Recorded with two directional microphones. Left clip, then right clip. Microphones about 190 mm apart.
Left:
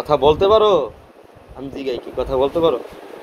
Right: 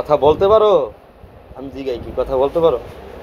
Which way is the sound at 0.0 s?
50° left (ahead or behind).